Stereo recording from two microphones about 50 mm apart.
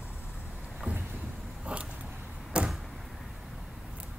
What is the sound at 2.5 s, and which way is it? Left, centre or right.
Door, centre.